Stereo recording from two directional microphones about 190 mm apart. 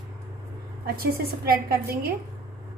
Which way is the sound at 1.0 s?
50° right (ahead or behind).